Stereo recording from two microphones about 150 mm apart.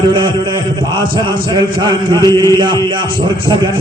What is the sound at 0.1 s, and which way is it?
A man's voice, 30° right (ahead or behind).